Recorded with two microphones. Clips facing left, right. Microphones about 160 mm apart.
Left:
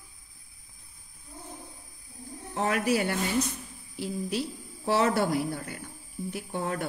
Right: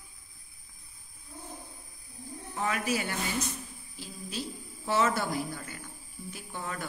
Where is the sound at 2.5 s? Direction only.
60° left (ahead or behind).